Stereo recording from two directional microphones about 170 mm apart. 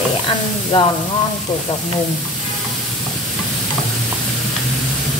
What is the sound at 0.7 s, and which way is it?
Speech, 30° left (ahead or behind).